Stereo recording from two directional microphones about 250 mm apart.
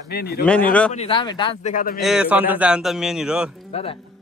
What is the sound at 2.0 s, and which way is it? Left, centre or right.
A man's voice, centre.